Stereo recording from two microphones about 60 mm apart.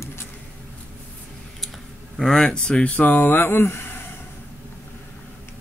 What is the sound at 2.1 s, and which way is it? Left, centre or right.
Speech, centre.